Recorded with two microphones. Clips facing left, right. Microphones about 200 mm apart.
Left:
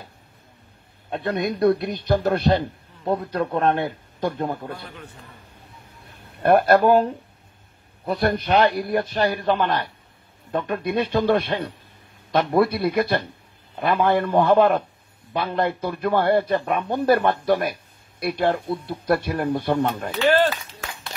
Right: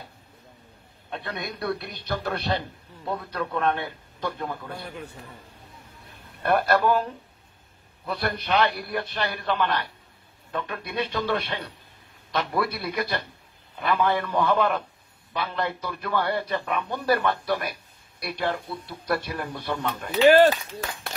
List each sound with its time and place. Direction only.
1.1 s speech: 45° left (ahead or behind)
3.6 s speech: 45° left (ahead or behind)
6.4 s speech: 50° left (ahead or behind)
20.2 s speech: 10° right (ahead or behind)